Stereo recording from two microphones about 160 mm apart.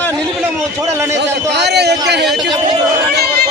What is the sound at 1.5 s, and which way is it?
Speech, 90° right.